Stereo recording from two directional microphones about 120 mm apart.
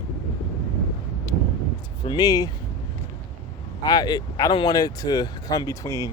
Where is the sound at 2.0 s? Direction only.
35° left (ahead or behind).